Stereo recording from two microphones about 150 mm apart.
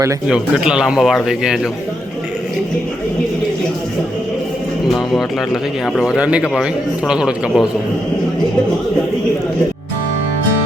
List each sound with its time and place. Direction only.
0.3 s speech: 5° right (ahead or behind)
4.9 s speech: centre (ahead or behind)